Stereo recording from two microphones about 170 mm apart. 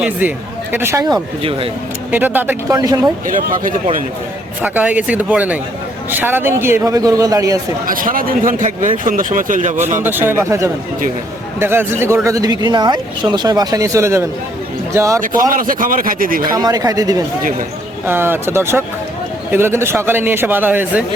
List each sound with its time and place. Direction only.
0.0 s speech: 10° right (ahead or behind); by 1.7 s 35° right (ahead or behind)
2.0 s a man's voice: 10° right (ahead or behind)
2.7 s speech: 20° right (ahead or behind)
3.2 s a man's voice: 50° right (ahead or behind)
4.6 s a man's voice: 10° right (ahead or behind)
7.9 s a man's voice: 55° right (ahead or behind)
10.0 s a man's voice: 10° right (ahead or behind)
15.4 s a man's voice: 55° right (ahead or behind)
16.4 s a man's voice: 20° right (ahead or behind)